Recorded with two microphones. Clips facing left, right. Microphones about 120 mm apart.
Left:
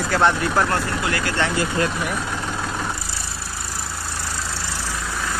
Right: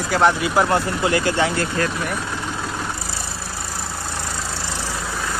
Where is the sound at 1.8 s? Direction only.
20° left (ahead or behind).